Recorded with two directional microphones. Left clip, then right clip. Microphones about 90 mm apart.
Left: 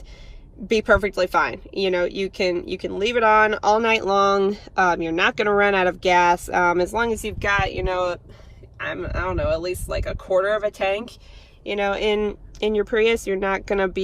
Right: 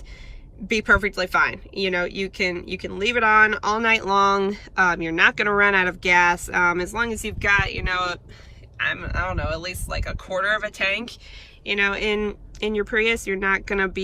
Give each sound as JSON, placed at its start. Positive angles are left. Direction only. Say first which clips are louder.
{"t": 0.7, "sound": "speech", "louder": "left 1 dB", "side_deg": 35}